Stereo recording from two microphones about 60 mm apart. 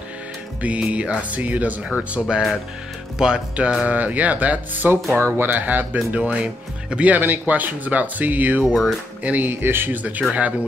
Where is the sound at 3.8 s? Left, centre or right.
Right.